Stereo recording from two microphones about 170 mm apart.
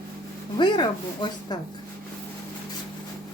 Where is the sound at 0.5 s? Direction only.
25° left (ahead or behind).